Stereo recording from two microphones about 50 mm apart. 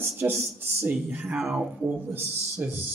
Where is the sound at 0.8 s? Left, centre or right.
Right.